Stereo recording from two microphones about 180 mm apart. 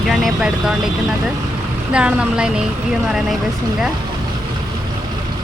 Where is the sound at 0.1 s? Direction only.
Centre (ahead or behind).